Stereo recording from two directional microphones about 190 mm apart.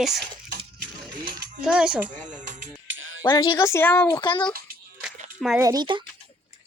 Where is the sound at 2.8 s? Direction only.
90° right.